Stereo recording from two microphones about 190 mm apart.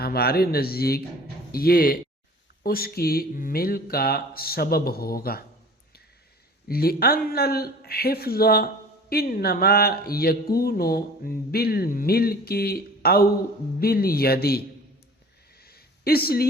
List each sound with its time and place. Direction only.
0.0 s speech: 55° left (ahead or behind)
6.7 s speech: 55° left (ahead or behind)
15.5 s a sound: 55° left (ahead or behind)